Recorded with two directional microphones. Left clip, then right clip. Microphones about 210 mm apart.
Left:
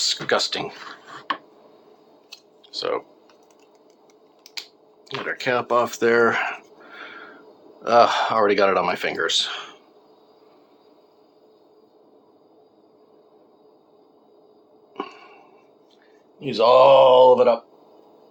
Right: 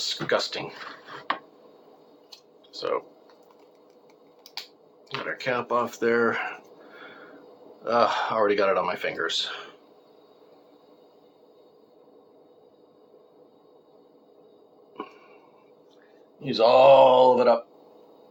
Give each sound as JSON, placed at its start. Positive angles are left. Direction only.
{"t": 0.0, "sound": "speech", "side_deg": 55}
{"t": 2.7, "sound": "speech", "side_deg": 50}
{"t": 5.0, "sound": "speech", "side_deg": 50}
{"t": 14.9, "sound": "a sound", "side_deg": 55}
{"t": 16.4, "sound": "speech", "side_deg": 35}